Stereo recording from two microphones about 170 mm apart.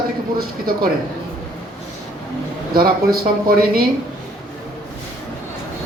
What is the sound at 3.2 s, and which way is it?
Speech, 60° right (ahead or behind).